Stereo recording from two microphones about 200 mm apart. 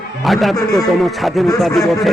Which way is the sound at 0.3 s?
Centre (ahead or behind).